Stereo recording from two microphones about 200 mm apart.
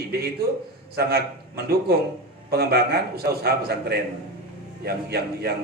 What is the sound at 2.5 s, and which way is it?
A man's voice, 55° right (ahead or behind).